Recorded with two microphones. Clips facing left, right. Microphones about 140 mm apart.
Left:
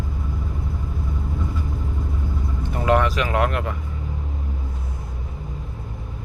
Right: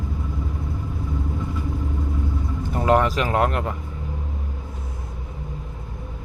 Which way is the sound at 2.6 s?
35° right (ahead or behind).